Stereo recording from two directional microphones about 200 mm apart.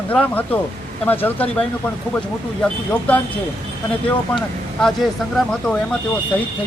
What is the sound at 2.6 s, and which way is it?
Speech, 5° left (ahead or behind).